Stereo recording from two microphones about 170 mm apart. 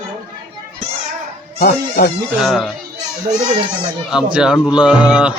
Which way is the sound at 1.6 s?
60° left (ahead or behind).